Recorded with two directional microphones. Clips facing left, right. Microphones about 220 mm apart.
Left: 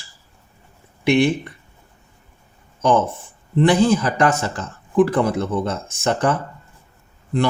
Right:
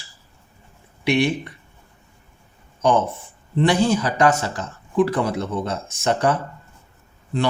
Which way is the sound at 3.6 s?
50° left (ahead or behind).